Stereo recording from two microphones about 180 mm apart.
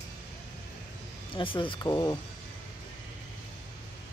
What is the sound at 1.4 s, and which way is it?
Speech, 30° left (ahead or behind).